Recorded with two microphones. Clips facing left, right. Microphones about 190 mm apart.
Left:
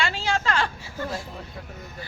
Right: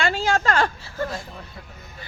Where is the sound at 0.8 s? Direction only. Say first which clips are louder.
Right 2 dB; 10° left (ahead or behind).